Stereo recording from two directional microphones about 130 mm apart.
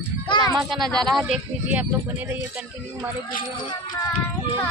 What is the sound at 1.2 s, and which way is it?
Speech, 15° right (ahead or behind).